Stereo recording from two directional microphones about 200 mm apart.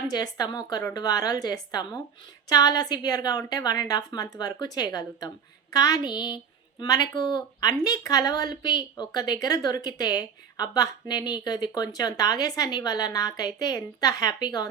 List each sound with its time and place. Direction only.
0.1 s a woman's voice: 20° left (ahead or behind)